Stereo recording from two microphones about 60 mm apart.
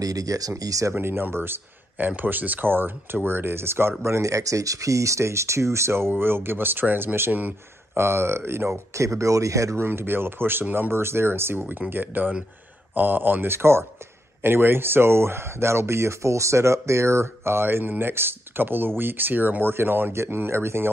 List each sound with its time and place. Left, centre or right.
0.0 s speech: right
0.9 s speech: right
4.0 s speech: right
8.0 s speech: right
9.8 s speech: right